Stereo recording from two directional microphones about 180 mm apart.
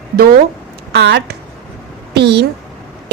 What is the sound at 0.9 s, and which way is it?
A woman's voice, 70° right (ahead or behind).